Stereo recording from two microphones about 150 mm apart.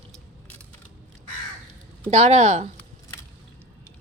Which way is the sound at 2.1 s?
50° right (ahead or behind).